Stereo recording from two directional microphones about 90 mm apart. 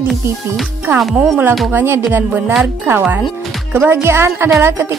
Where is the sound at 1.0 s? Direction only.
Centre (ahead or behind).